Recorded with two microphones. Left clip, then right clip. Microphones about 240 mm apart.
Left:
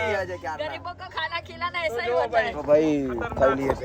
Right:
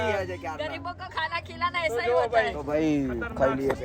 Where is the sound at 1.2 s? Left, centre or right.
Left.